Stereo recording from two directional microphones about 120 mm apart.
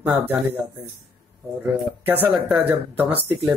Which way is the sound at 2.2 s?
15° right (ahead or behind).